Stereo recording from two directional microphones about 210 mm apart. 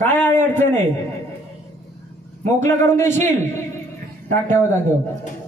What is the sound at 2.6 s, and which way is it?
Music, 10° left (ahead or behind).